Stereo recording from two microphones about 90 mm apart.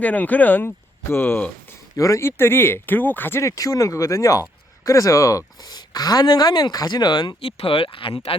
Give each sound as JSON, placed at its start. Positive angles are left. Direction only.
{"t": 0.0, "sound": "speech", "side_deg": 15}
{"t": 2.0, "sound": "speech", "side_deg": 35}
{"t": 5.6, "sound": "speech", "side_deg": 45}
{"t": 7.4, "sound": "speech", "side_deg": 90}